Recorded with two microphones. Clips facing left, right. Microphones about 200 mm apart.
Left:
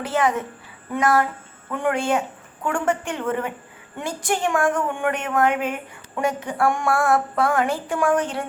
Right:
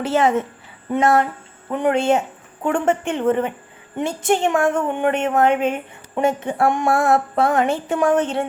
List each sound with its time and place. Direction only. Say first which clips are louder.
0.0 s a woman's voice: right 4 dB; 25° right (ahead or behind)